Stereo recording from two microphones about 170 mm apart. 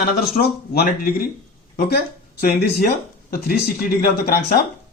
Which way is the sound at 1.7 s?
65° left (ahead or behind).